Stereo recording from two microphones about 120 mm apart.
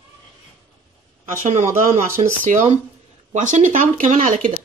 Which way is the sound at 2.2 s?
55° right (ahead or behind).